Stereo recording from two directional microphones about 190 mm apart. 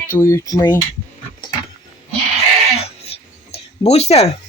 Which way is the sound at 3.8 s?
35° left (ahead or behind).